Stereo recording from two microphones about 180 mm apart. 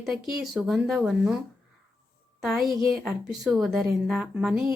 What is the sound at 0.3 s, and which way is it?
Speech, centre (ahead or behind).